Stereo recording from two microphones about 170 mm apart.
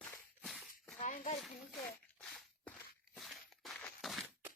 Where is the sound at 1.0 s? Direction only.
45° left (ahead or behind).